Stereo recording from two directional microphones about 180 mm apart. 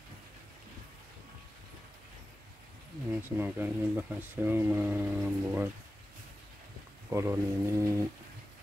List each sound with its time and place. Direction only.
3.2 s speech: 10° right (ahead or behind)
7.1 s speech: 15° right (ahead or behind)